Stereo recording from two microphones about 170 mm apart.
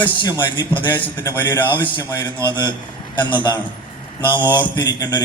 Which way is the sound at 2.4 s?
25° left (ahead or behind).